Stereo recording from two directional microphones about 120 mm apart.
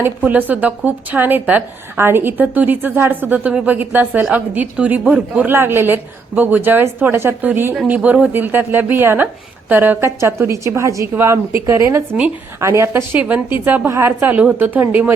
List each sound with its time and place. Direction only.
0.0 s a woman's voice: 15° right (ahead or behind)